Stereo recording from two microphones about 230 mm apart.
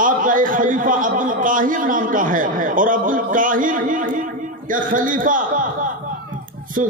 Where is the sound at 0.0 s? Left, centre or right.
Right.